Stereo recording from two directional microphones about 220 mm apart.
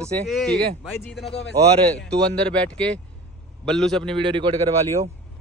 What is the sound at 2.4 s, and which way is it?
A man's voice, 5° left (ahead or behind).